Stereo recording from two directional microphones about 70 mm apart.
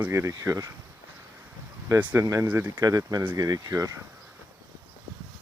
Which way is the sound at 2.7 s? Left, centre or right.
Right.